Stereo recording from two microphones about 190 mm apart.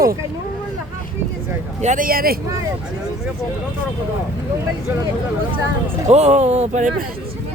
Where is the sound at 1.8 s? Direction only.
40° right (ahead or behind).